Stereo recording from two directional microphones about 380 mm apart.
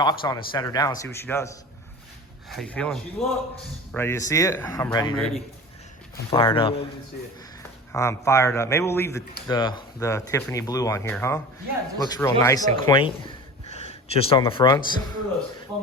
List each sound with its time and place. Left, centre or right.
0.0 s speech: centre
6.3 s speech: centre
7.9 s speech: centre